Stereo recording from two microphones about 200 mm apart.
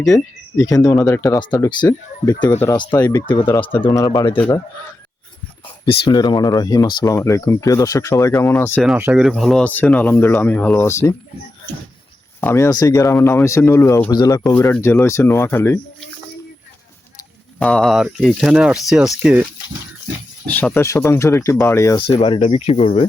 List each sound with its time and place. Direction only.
0.1 s speech: 15° left (ahead or behind)
2.7 s speech: 20° left (ahead or behind)
5.8 s speech: 20° left (ahead or behind)
8.8 s speech: 5° right (ahead or behind); by 11.1 s 15° left (ahead or behind)
12.4 s speech: 10° left (ahead or behind)
17.6 s speech: 5° left (ahead or behind)
20.5 s speech: 10° left (ahead or behind)
22.2 s speech: 25° left (ahead or behind)